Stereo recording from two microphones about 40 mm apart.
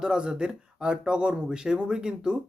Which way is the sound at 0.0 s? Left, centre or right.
Right.